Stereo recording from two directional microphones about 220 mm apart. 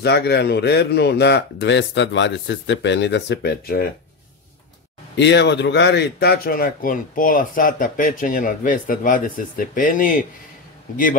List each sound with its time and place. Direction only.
0.0 s speech: 50° left (ahead or behind)
5.1 s a man's voice: 50° left (ahead or behind)